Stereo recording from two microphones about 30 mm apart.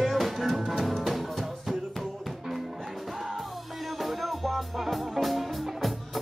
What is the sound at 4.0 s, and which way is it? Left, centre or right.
Music, centre.